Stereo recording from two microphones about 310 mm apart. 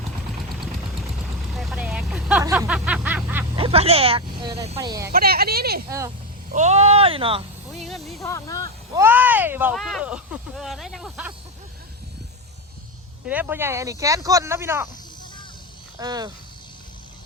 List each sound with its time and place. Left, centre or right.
1.5 s vehicle: centre
3.6 s speech: centre
5.1 s speech: right
7.9 s speech: centre
8.9 s speech: centre
13.2 s speech: centre
16.0 s speech: centre